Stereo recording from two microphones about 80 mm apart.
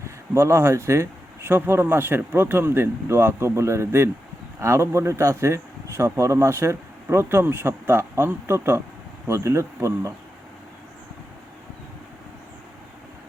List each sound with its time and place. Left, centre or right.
0.3 s speech: right